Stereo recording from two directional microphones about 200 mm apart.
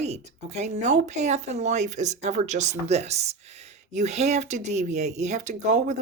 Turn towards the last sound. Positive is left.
turn(degrees=-35)  # may be behind; listen again after turning